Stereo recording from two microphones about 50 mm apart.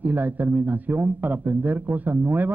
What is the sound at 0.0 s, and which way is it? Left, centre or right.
Speech, right.